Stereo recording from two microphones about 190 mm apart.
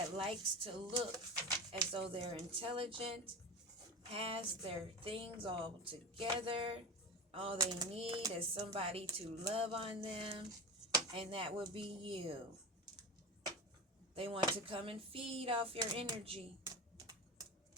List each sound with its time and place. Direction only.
0.2 s a woman's voice: 30° right (ahead or behind)
7.9 s a sound: 30° right (ahead or behind)
8.4 s a woman's voice: 30° right (ahead or behind)
14.2 s a woman's voice: 30° right (ahead or behind)
16.6 s typing: 20° right (ahead or behind)